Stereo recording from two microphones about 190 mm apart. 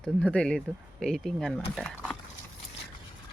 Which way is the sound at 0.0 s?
5° left (ahead or behind).